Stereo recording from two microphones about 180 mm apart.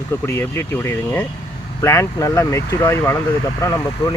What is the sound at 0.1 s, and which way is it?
Speech, 15° left (ahead or behind).